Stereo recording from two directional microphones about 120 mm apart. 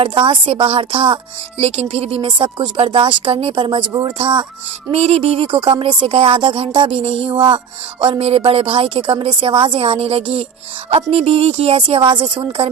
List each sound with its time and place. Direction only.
0.0 s a woman's voice: 45° right (ahead or behind)
4.9 s a sound: 60° right (ahead or behind)
5.5 s a woman's voice: 40° right (ahead or behind)